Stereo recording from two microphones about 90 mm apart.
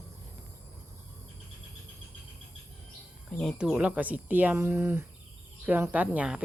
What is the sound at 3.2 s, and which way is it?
Speech, 10° left (ahead or behind).